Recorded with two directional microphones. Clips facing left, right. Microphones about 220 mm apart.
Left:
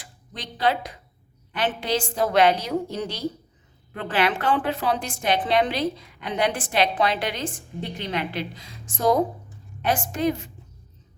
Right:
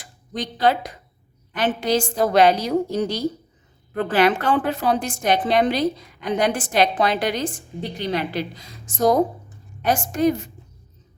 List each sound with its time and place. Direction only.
0.0 s a woman's voice: 45° right (ahead or behind)